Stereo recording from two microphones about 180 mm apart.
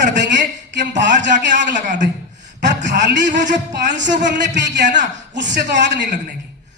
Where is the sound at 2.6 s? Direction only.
75° right (ahead or behind).